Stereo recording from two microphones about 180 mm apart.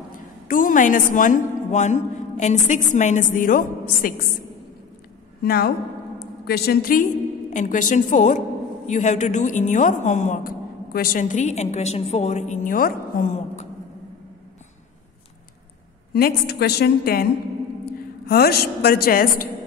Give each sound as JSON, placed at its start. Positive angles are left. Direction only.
{"t": 0.5, "sound": "a woman's voice", "side_deg": 50}
{"t": 5.4, "sound": "a woman's voice", "side_deg": 60}
{"t": 16.1, "sound": "a woman's voice", "side_deg": 60}